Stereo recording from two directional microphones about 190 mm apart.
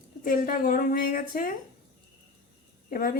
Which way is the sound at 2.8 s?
50° left (ahead or behind).